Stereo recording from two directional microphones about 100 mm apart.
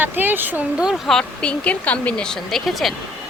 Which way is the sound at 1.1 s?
10° left (ahead or behind).